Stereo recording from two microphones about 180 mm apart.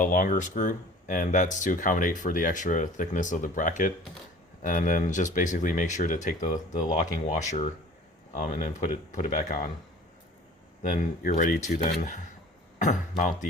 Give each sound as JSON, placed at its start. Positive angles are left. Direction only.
{"t": 0.0, "sound": "speech", "side_deg": 50}
{"t": 10.8, "sound": "speech", "side_deg": 45}